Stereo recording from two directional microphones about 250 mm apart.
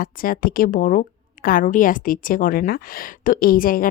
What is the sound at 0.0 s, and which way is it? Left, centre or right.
A woman's voice, left.